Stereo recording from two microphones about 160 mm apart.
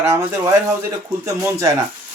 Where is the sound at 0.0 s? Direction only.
15° right (ahead or behind).